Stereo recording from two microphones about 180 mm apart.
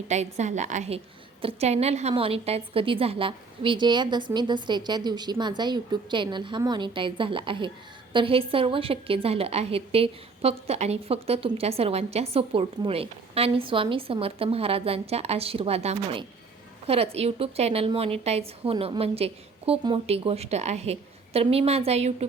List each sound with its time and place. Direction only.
0.1 s a woman's voice: 40° right (ahead or behind)